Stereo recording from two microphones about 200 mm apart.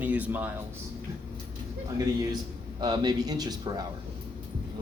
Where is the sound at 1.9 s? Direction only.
15° right (ahead or behind).